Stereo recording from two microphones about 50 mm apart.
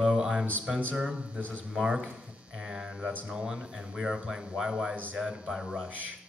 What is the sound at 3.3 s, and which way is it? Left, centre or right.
Speech, centre.